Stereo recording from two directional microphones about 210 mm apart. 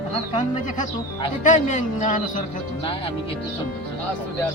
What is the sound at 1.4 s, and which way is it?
Speech, 35° left (ahead or behind).